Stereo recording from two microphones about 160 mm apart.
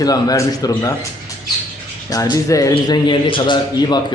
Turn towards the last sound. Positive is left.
turn(degrees=25)  # may be behind; listen again after turning